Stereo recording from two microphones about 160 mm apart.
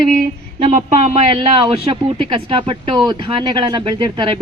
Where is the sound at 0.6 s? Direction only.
45° right (ahead or behind); by 4.3 s 30° right (ahead or behind).